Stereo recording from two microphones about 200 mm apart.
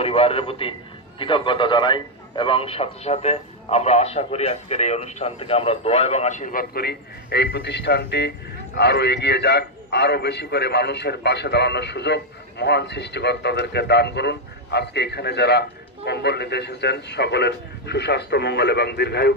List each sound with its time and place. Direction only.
0.0 s a man's voice: 30° left (ahead or behind); by 19.3 s 55° left (ahead or behind)